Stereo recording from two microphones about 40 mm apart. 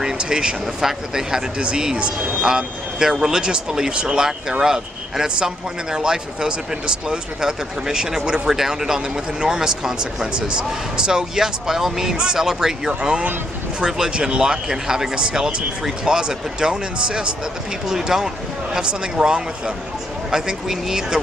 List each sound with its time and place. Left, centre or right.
0.0 s speech: right